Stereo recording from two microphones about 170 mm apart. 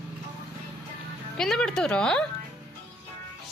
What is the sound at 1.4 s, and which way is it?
Speech, 5° left (ahead or behind).